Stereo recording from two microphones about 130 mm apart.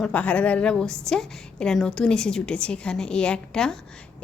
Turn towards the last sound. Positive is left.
turn(degrees=5)  # may be behind; listen again after turning